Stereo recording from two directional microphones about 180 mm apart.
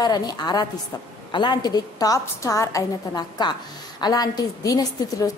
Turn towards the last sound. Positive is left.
turn(degrees=20)  # may be behind; listen again after turning